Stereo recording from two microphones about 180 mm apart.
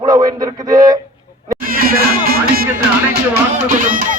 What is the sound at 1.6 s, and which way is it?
Speech, 55° right (ahead or behind).